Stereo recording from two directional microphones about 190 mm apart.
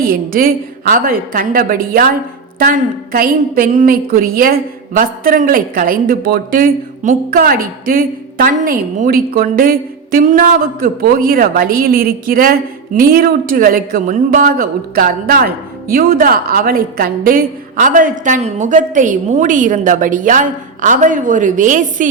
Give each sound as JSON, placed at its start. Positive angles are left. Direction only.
{"t": 0.0, "sound": "a woman's voice", "side_deg": -50}